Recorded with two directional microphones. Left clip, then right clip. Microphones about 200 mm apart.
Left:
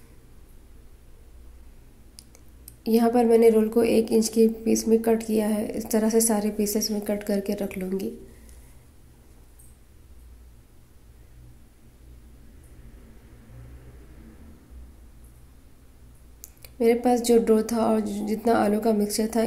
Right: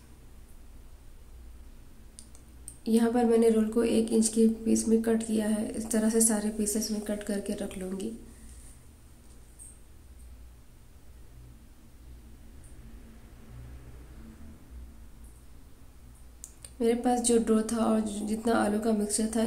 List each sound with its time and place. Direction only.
2.8 s a woman's voice: 20° left (ahead or behind)
16.6 s a woman's voice: 20° left (ahead or behind)